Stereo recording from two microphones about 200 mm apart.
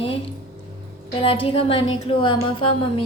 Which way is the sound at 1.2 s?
25° left (ahead or behind).